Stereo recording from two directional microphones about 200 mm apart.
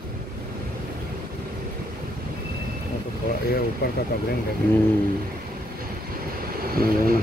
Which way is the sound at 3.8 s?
55° left (ahead or behind).